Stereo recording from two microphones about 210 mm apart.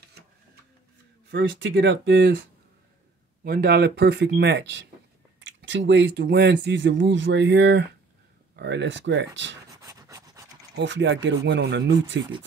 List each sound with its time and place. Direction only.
1.3 s speech: 60° right (ahead or behind)
3.4 s speech: 45° right (ahead or behind)
9.8 s filing: 15° right (ahead or behind)
10.8 s speech: 60° right (ahead or behind)